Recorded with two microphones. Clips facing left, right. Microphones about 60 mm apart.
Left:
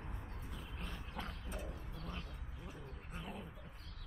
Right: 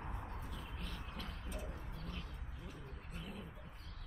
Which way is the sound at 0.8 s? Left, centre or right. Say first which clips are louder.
Left 5 dB; centre.